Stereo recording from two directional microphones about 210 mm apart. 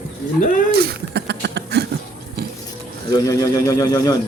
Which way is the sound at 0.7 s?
50° right (ahead or behind).